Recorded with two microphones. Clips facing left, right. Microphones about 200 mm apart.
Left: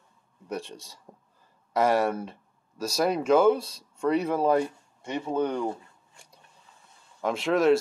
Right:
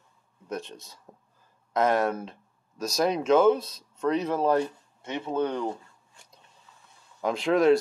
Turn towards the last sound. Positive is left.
turn(degrees=0)  # may be behind; listen again after turning